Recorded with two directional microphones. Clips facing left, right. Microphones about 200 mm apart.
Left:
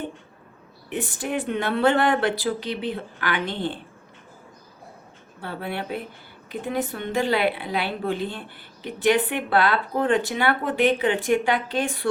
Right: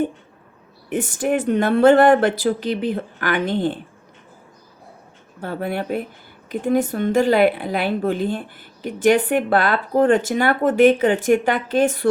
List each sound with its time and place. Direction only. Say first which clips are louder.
0.9 s a woman's voice: right 7 dB; 50° right (ahead or behind)
5.4 s a woman's voice: right 6 dB; 45° right (ahead or behind)